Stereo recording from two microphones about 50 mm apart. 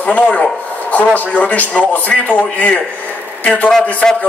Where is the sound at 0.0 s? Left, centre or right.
Left.